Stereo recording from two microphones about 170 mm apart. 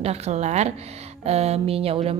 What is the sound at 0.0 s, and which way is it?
A woman's voice, 40° right (ahead or behind).